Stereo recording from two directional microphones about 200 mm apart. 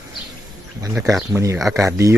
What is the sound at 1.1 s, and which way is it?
Speech, 10° right (ahead or behind).